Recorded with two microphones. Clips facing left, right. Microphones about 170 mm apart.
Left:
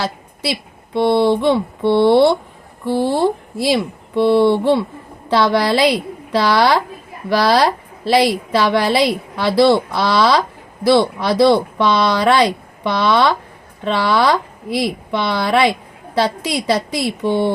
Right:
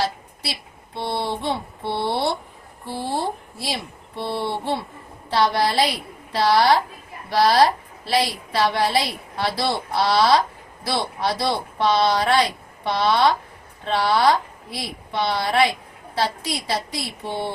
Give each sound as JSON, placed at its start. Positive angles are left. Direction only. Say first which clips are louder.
{"t": 0.0, "sound": "a woman's voice", "louder": "left 3 dB", "side_deg": 90}